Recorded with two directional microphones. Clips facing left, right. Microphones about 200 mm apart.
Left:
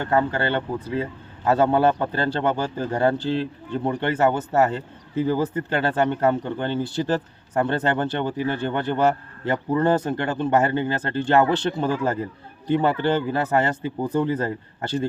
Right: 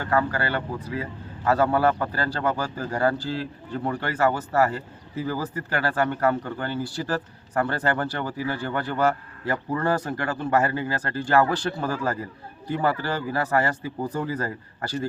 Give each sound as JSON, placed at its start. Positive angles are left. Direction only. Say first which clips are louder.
{"t": 0.0, "sound": "a man's voice", "louder": "left 3 dB", "side_deg": 25}